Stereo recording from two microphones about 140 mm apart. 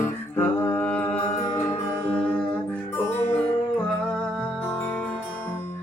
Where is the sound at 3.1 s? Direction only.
15° left (ahead or behind).